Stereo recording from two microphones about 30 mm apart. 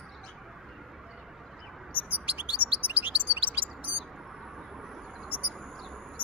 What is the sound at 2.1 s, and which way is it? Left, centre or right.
Bird, right.